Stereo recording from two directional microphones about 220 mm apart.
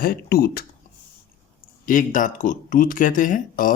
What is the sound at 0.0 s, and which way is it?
Speech, 40° left (ahead or behind).